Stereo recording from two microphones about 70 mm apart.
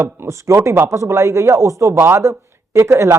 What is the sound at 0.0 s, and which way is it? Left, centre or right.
Speech, right.